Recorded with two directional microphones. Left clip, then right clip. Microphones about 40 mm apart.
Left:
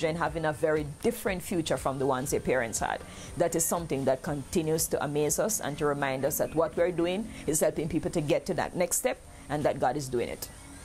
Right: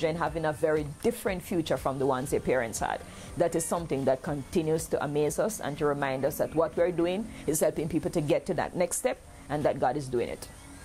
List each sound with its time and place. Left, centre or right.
0.0 s a woman's voice: right
8.3 s a woman's voice: right